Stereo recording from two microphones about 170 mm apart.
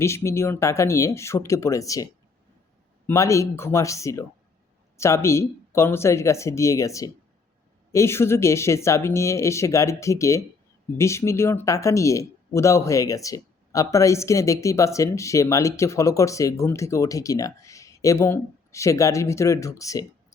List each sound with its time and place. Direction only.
0.0 s speech: 15° left (ahead or behind)
3.1 s speech: 15° left (ahead or behind)